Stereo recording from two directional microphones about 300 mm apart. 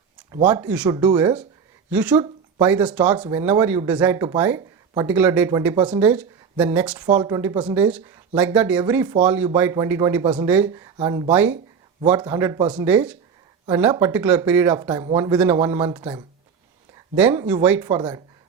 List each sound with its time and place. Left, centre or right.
0.4 s speech: centre